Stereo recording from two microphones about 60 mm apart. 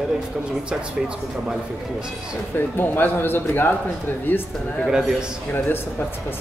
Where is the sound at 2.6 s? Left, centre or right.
Left.